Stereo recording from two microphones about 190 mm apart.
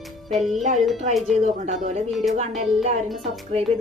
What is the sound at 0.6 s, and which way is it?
Speech, 40° right (ahead or behind).